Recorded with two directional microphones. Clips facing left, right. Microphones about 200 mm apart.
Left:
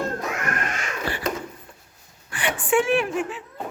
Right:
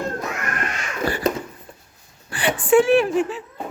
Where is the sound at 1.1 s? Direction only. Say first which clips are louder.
Right 6 dB; 45° right (ahead or behind).